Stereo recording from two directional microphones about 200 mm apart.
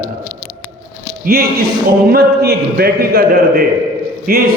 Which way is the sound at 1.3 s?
50° right (ahead or behind).